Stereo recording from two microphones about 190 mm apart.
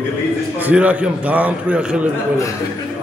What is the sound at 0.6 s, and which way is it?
A man's voice, 10° right (ahead or behind).